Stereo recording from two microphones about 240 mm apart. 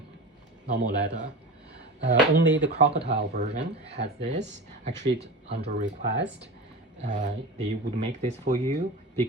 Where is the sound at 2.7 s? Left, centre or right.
Right.